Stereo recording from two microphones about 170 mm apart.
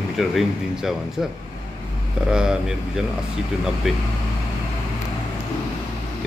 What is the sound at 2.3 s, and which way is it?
Speech, 5° right (ahead or behind).